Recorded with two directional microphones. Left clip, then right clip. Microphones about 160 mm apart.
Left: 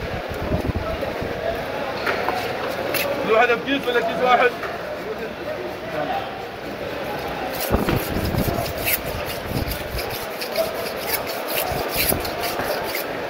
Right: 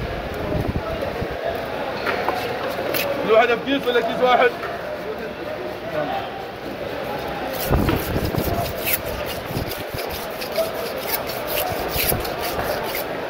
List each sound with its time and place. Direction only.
3.3 s speech: 50° right (ahead or behind)